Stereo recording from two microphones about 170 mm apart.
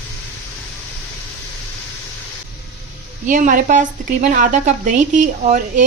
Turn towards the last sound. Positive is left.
turn(degrees=-50)  # may be behind; listen again after turning